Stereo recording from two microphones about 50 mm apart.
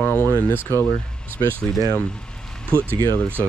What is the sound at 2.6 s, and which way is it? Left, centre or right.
Speech, right.